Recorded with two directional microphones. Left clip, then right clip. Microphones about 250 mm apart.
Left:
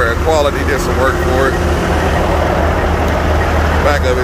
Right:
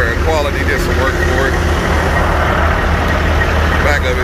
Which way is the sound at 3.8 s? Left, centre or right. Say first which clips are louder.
Left 3 dB; centre.